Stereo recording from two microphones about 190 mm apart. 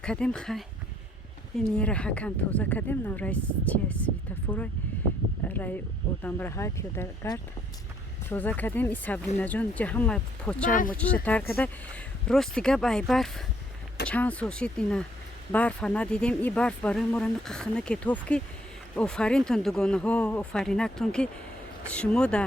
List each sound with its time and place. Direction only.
0.0 s speech: 5° left (ahead or behind)
10.7 s speech: 45° left (ahead or behind)
10.9 s speech: 5° left (ahead or behind)